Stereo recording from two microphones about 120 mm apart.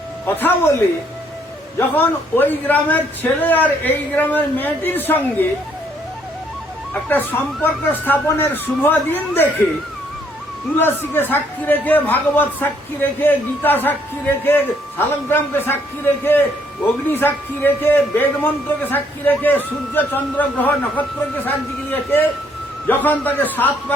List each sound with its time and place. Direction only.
0.3 s speech: 15° left (ahead or behind)
2.0 s speech: 15° left (ahead or behind)
6.9 s speech: 15° left (ahead or behind)
10.8 s a man's voice: 20° left (ahead or behind)
16.8 s speech: 15° left (ahead or behind)